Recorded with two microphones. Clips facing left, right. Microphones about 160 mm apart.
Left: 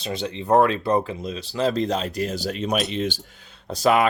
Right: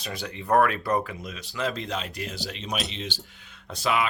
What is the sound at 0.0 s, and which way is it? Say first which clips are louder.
Speech: left 7 dB; 25° left (ahead or behind).